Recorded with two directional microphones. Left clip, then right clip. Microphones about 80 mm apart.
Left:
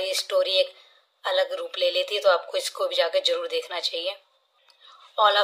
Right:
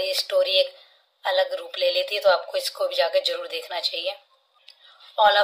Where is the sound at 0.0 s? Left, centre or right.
Left.